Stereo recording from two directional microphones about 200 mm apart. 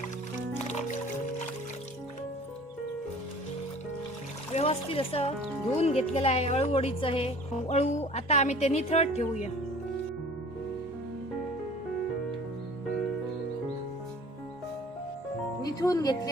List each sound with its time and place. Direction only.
4.5 s speech: 30° left (ahead or behind)
15.6 s music: 15° left (ahead or behind)